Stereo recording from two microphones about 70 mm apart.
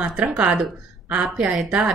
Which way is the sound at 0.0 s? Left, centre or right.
Centre.